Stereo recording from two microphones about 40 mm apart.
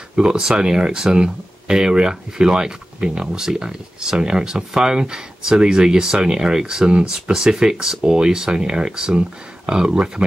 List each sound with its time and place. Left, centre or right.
0.1 s speech: centre